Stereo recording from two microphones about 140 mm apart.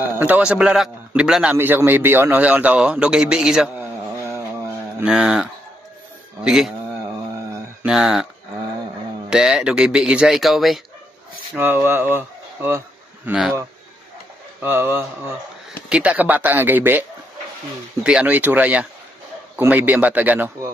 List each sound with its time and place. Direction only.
0.0 s a man's voice: 10° right (ahead or behind)
5.0 s speech: 5° right (ahead or behind)
7.8 s speech: 5° right (ahead or behind)
9.3 s speech: 5° right (ahead or behind)
11.5 s speech: 15° right (ahead or behind)
13.3 s speech: 5° right (ahead or behind)
14.6 s a man's voice: 15° right (ahead or behind)
18.0 s a man's voice: 10° right (ahead or behind)